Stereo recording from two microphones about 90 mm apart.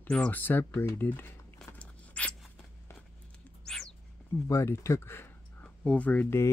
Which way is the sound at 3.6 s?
5° left (ahead or behind).